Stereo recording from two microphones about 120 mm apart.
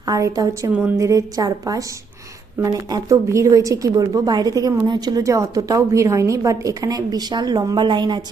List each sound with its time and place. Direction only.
0.0 s a woman's voice: 30° right (ahead or behind)
0.7 s a woman's voice: 15° right (ahead or behind)
0.9 s a woman's voice: 30° right (ahead or behind)